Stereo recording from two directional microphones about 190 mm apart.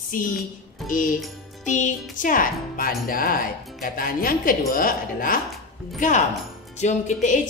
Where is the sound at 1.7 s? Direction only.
40° left (ahead or behind).